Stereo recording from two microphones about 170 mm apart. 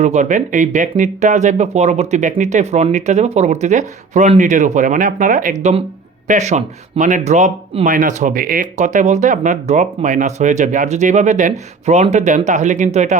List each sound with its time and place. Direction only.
0.0 s speech: 45° right (ahead or behind)